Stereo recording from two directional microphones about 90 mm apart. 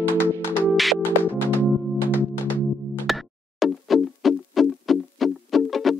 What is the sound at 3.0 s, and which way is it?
Music, centre (ahead or behind).